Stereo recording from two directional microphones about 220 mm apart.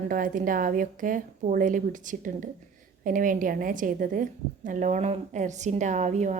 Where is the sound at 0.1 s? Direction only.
40° right (ahead or behind).